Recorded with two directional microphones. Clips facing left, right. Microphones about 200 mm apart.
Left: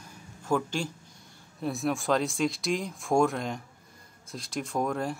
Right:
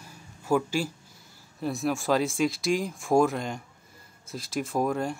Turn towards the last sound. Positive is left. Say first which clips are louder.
# right 2 dB
turn(degrees=0)  # may be behind; listen again after turning